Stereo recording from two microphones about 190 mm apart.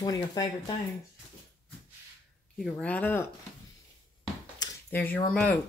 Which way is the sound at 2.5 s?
5° left (ahead or behind).